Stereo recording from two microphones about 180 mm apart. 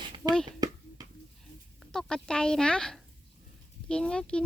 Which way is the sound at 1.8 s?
5° left (ahead or behind).